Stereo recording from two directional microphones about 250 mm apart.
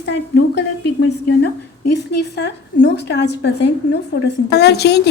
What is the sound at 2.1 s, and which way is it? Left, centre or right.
A woman's voice, left.